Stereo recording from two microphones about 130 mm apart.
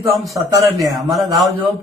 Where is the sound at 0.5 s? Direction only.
25° right (ahead or behind).